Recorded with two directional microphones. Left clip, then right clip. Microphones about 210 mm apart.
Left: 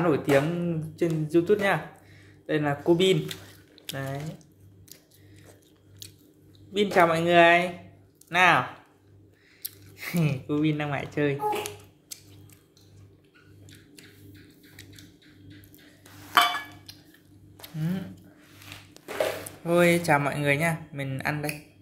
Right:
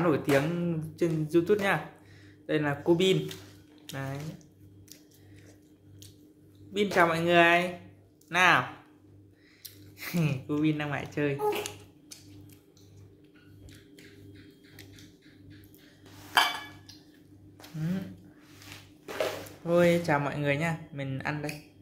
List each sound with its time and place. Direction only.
0.0 s speech: centre (ahead or behind)
6.7 s speech: 5° left (ahead or behind)
9.6 s a sound: 30° left (ahead or behind)
9.9 s speech: 5° left (ahead or behind)
19.6 s speech: 5° left (ahead or behind)